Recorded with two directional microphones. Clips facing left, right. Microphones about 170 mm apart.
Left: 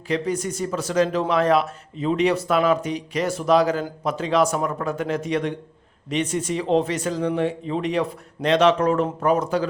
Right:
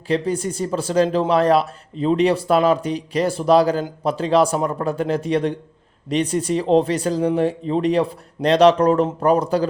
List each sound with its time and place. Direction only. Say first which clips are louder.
0.1 s speech: right 3 dB; 30° right (ahead or behind)